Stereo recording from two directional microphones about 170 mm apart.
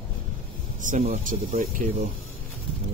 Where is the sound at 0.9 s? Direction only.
50° right (ahead or behind).